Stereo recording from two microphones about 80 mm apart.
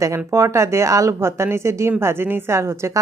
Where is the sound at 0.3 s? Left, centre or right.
Right.